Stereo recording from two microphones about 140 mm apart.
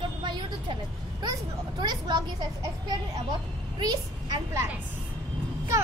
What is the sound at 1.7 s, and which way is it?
Vehicle, 30° right (ahead or behind).